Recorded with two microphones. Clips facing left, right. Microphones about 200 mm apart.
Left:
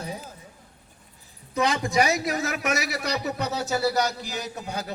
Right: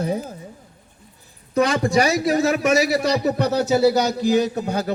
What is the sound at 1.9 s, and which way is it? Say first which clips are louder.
A man's voice: right 5 dB; 35° right (ahead or behind).